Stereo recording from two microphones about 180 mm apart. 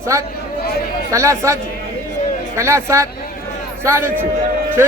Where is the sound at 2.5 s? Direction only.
15° right (ahead or behind).